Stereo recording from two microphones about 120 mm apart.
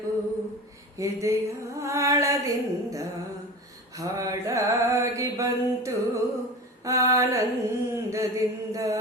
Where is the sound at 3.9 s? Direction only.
25° right (ahead or behind).